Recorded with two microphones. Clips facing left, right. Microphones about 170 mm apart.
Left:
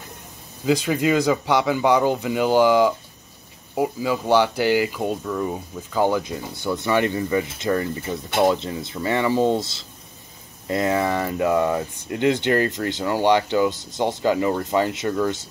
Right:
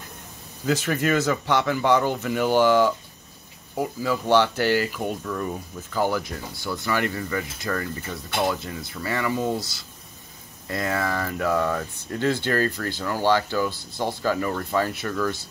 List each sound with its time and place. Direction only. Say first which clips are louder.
0.7 s speech: left 3 dB; 15° left (ahead or behind)
5.2 s speech: left 3 dB; 10° left (ahead or behind)